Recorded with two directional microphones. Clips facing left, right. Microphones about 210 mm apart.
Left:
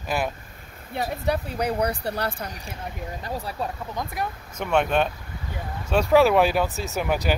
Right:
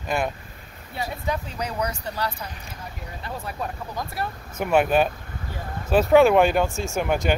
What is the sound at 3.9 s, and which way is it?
Speech, 20° left (ahead or behind).